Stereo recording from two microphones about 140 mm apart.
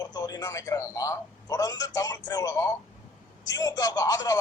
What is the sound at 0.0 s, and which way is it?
A man's voice, 30° left (ahead or behind).